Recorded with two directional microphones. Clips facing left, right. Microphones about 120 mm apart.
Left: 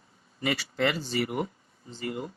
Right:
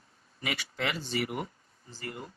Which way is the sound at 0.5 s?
35° left (ahead or behind).